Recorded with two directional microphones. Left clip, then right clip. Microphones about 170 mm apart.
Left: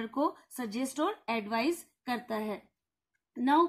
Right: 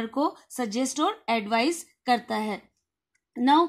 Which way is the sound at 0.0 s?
35° right (ahead or behind).